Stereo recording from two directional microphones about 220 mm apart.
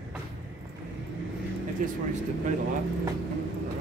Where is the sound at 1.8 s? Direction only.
40° right (ahead or behind).